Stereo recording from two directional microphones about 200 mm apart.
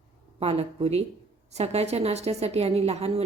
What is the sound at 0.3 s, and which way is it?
A woman's voice, 30° right (ahead or behind).